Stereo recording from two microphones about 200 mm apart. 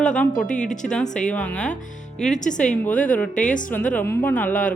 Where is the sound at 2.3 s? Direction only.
40° left (ahead or behind).